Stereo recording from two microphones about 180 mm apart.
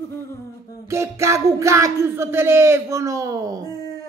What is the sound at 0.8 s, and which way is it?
Music, 15° right (ahead or behind).